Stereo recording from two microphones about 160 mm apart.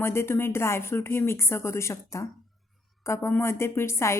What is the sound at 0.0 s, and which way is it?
A woman's voice, 15° left (ahead or behind).